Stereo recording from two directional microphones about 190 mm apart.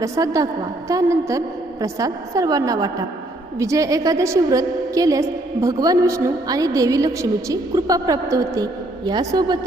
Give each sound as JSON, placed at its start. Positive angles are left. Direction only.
{"t": 0.0, "sound": "a woman's voice", "side_deg": -15}